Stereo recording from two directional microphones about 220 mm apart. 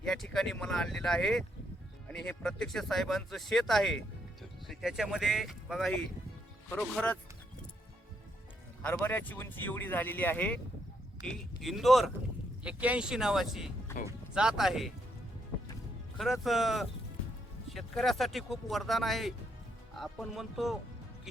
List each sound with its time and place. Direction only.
0.0 s speech: centre (ahead or behind)
8.8 s speech: 10° left (ahead or behind)
13.9 s speech: 10° left (ahead or behind)
14.3 s speech: centre (ahead or behind)
16.1 s speech: centre (ahead or behind)